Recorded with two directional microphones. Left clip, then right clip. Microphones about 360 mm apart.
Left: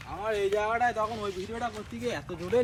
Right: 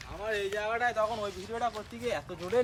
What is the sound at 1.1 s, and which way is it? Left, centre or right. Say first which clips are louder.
Speech: left 1 dB; centre.